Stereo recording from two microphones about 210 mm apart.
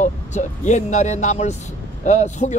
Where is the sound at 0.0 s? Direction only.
35° left (ahead or behind).